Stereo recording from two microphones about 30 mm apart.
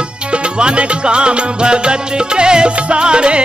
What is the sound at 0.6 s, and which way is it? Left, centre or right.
Music, right.